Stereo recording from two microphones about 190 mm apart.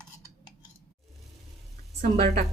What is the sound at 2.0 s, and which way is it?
Speech, 45° right (ahead or behind).